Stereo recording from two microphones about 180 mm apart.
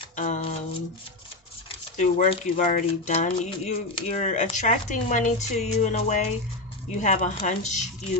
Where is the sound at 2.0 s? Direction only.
45° left (ahead or behind).